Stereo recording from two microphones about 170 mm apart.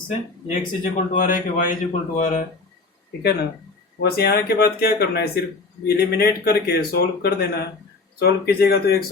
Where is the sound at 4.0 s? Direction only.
65° left (ahead or behind).